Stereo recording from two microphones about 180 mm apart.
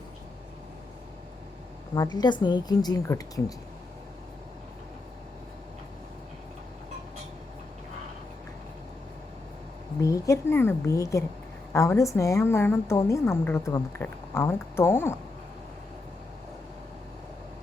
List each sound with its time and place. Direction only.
2.1 s a woman's voice: 25° left (ahead or behind)
10.0 s a woman's voice: 15° left (ahead or behind)